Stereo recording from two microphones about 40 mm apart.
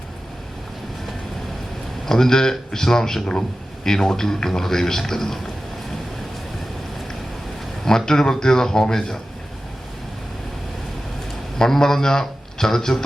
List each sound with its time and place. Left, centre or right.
2.0 s a man's voice: centre
7.9 s a man's voice: centre
11.5 s a man's voice: centre